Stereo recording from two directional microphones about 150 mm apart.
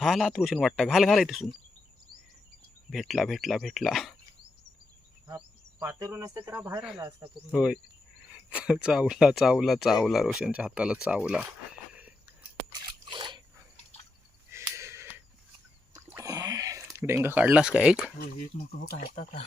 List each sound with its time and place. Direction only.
0.0 s speech: centre (ahead or behind)
2.9 s speech: centre (ahead or behind)
5.8 s speech: 20° right (ahead or behind)
12.7 s a sound: 30° right (ahead or behind)
14.5 s a sound: 15° right (ahead or behind)
18.9 s speech: 45° left (ahead or behind)